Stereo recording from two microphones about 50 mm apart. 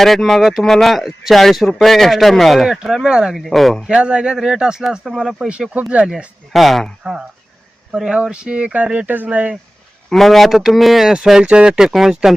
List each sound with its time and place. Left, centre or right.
0.0 s speech: centre
2.6 s speech: centre
3.3 s speech: centre
3.8 s speech: centre
6.5 s speech: centre
7.0 s speech: centre
8.7 s speech: right
10.1 s speech: centre
11.1 s speech: centre